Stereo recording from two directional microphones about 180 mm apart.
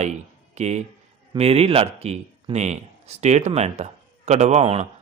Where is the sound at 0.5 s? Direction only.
40° right (ahead or behind).